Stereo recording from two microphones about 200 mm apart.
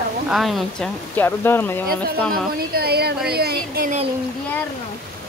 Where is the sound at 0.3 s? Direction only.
Centre (ahead or behind).